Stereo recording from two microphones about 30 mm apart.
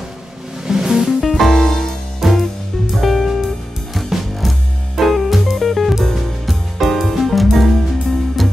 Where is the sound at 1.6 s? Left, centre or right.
Centre.